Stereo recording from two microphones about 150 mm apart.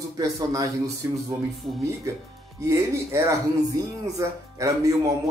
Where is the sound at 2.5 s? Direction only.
20° right (ahead or behind).